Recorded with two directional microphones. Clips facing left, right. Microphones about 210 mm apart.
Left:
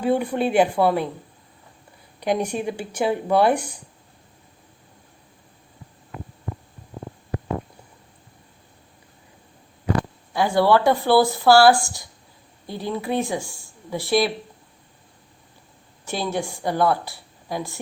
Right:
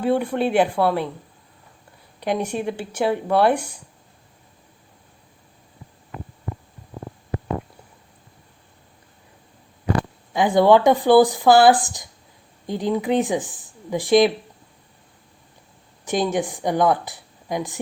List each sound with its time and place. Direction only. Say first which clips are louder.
0.0 s speech: right 1 dB; 5° left (ahead or behind)
2.2 s speech: even; 5° left (ahead or behind)
10.3 s speech: right 3 dB; 20° right (ahead or behind)
16.0 s a woman's voice: right 4 dB; 15° right (ahead or behind)